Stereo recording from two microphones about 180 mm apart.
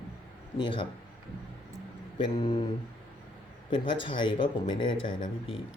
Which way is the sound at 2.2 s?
25° left (ahead or behind).